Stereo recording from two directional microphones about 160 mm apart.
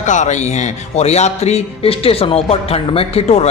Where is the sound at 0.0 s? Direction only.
50° left (ahead or behind).